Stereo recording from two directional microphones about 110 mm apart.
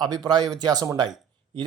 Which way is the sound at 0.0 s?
40° right (ahead or behind).